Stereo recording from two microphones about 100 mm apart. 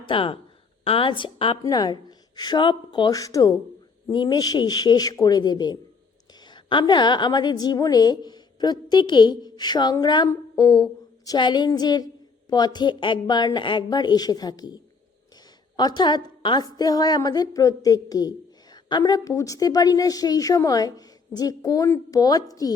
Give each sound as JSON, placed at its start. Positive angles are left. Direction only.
{"t": 0.0, "sound": "speech", "side_deg": 60}
{"t": 1.6, "sound": "a woman's voice", "side_deg": 40}
{"t": 3.1, "sound": "a woman's voice", "side_deg": 35}
{"t": 4.1, "sound": "a woman's voice", "side_deg": 45}
{"t": 11.3, "sound": "a woman's voice", "side_deg": 50}